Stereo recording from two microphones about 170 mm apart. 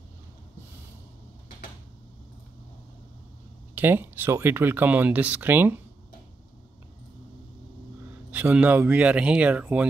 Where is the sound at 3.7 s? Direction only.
10° right (ahead or behind).